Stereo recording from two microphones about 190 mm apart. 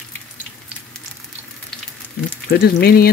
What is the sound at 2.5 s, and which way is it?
Speech, 55° left (ahead or behind).